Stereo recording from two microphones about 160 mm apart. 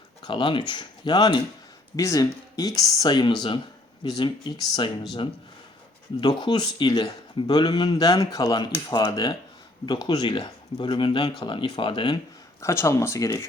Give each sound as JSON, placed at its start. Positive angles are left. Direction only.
{"t": 0.2, "sound": "speech", "side_deg": 30}
{"t": 6.1, "sound": "speech", "side_deg": 25}
{"t": 12.5, "sound": "speech", "side_deg": 15}